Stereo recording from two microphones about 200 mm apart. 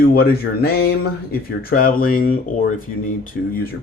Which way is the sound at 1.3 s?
45° left (ahead or behind).